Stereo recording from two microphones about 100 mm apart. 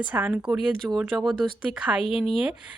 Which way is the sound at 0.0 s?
15° right (ahead or behind).